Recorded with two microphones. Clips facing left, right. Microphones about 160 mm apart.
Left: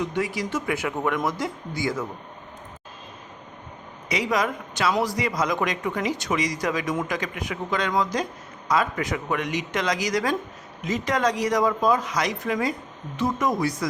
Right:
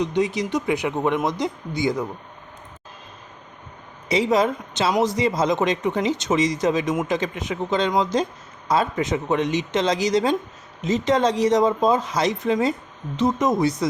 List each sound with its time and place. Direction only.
0.0 s a man's voice: 20° right (ahead or behind)
4.1 s a man's voice: 25° right (ahead or behind)